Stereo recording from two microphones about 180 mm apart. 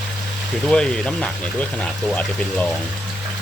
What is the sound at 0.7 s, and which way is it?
Speech, 5° left (ahead or behind).